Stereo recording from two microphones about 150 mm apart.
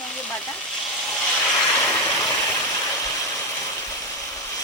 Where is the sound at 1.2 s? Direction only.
5° left (ahead or behind).